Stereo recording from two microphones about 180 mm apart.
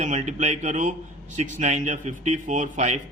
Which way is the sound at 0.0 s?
40° right (ahead or behind).